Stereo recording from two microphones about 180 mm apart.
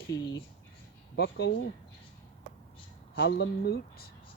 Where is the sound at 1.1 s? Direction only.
65° left (ahead or behind).